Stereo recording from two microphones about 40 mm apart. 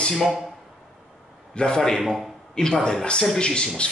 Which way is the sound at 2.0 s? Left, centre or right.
Centre.